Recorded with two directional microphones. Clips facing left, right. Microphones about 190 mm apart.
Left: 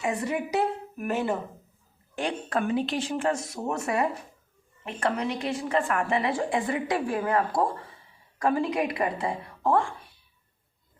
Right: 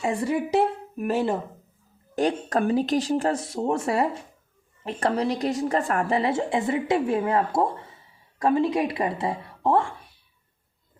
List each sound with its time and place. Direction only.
0.0 s a woman's voice: 30° right (ahead or behind)